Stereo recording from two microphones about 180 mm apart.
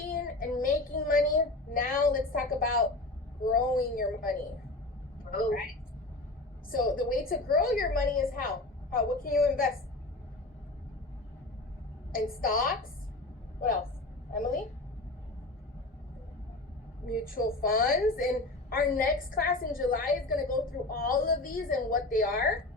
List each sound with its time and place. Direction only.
0.0 s child singing: 55° left (ahead or behind)
3.4 s a woman's voice: 55° left (ahead or behind)
6.7 s a woman's voice: 50° left (ahead or behind)
12.1 s a woman's voice: 55° left (ahead or behind)
17.1 s a woman's voice: 50° left (ahead or behind)